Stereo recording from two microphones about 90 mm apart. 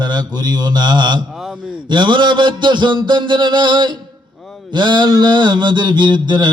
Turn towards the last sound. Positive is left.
turn(degrees=-55)  # may be behind; listen again after turning